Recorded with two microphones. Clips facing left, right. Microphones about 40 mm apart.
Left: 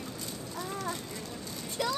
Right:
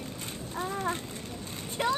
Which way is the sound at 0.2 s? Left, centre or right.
Right.